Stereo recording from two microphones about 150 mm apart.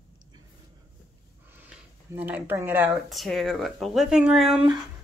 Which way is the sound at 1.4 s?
10° right (ahead or behind).